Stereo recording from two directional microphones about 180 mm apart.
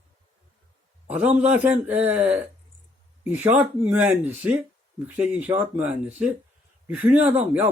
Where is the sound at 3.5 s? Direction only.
10° right (ahead or behind).